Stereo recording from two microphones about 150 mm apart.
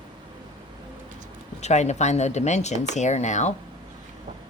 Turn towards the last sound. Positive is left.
turn(degrees=50)  # may be behind; listen again after turning